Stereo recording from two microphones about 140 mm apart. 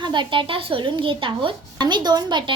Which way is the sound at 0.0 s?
35° right (ahead or behind).